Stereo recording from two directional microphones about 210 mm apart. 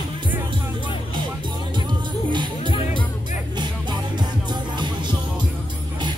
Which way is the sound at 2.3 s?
20° right (ahead or behind).